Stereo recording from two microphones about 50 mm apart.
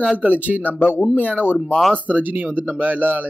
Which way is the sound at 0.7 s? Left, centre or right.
Left.